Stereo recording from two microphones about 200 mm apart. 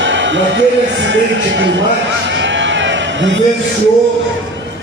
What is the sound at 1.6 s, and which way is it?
Speech, 65° right (ahead or behind).